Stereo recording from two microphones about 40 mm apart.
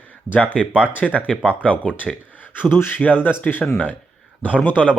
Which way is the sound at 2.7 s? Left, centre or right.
Left.